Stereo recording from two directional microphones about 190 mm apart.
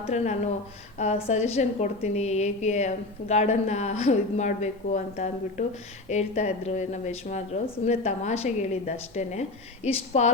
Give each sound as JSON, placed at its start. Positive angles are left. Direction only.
{"t": 0.1, "sound": "a woman's voice", "side_deg": 35}